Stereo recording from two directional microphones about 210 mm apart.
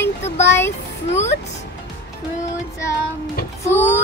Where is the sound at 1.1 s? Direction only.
30° left (ahead or behind).